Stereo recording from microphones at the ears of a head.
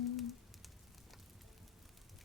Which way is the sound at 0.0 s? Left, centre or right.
Left.